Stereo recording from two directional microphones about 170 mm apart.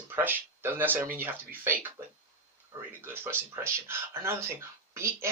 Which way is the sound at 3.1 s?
15° right (ahead or behind).